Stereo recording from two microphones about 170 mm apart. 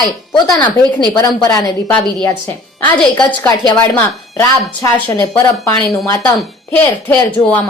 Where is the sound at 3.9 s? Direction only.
15° left (ahead or behind).